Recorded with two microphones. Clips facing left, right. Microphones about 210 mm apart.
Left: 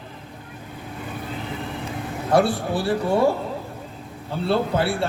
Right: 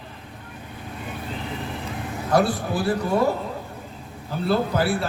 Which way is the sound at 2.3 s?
30° left (ahead or behind).